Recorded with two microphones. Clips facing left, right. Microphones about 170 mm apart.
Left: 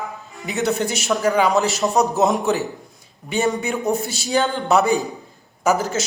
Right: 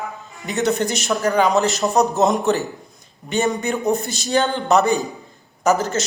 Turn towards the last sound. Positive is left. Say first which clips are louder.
# right 1 dB
turn(degrees=5)  # may be behind; listen again after turning